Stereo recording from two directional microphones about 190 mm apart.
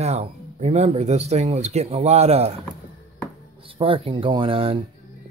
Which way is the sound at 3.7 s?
30° right (ahead or behind).